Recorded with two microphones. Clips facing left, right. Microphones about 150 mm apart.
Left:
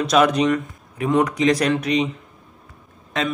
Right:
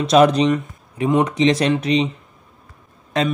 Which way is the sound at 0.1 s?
30° right (ahead or behind).